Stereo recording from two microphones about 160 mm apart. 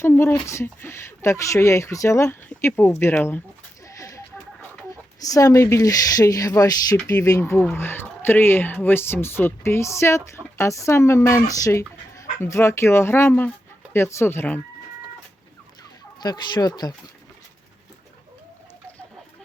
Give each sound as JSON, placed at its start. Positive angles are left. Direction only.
{"t": 0.0, "sound": "speech", "side_deg": 15}
{"t": 3.8, "sound": "a sound", "side_deg": 20}
{"t": 5.2, "sound": "speech", "side_deg": 20}
{"t": 16.2, "sound": "speech", "side_deg": 25}